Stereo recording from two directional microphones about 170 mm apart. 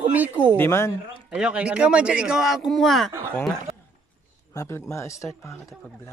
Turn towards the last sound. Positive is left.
turn(degrees=15)  # may be behind; listen again after turning